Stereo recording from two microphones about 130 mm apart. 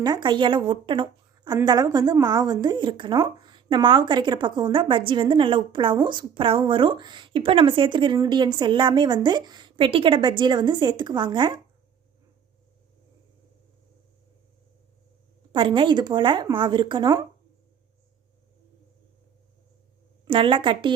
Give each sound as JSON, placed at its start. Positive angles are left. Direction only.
{"t": 0.0, "sound": "speech", "side_deg": -35}
{"t": 15.5, "sound": "speech", "side_deg": -40}
{"t": 20.2, "sound": "speech", "side_deg": -40}